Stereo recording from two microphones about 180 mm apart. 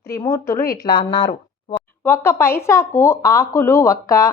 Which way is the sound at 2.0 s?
15° left (ahead or behind).